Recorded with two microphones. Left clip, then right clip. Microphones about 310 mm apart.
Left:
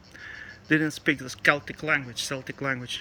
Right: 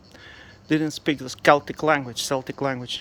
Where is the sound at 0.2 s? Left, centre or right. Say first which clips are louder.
Left 5 dB; centre.